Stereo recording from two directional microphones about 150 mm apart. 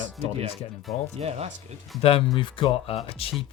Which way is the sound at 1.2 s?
45° right (ahead or behind).